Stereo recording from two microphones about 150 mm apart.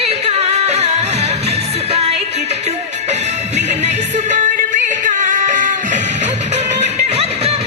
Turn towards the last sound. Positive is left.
turn(degrees=-45)  # may be behind; listen again after turning